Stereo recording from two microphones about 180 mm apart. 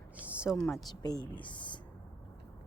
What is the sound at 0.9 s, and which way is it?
Speech, 20° left (ahead or behind).